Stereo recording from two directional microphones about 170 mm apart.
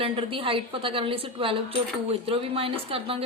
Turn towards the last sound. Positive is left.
turn(degrees=-35)  # may be behind; listen again after turning